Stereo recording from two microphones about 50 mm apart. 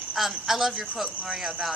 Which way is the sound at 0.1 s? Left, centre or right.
Centre.